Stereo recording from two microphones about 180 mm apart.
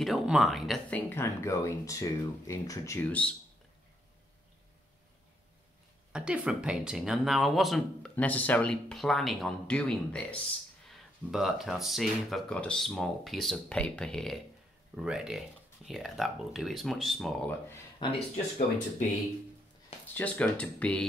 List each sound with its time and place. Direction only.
0.0 s speech: centre (ahead or behind)
6.1 s speech: 5° right (ahead or behind)
17.9 s speech: 30° left (ahead or behind)
20.2 s speech: 10° left (ahead or behind)